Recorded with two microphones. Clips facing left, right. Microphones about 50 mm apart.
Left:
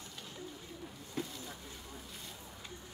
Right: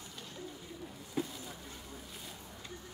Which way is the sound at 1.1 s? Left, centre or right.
Centre.